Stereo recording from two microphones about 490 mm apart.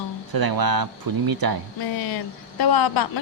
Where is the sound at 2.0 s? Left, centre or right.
Left.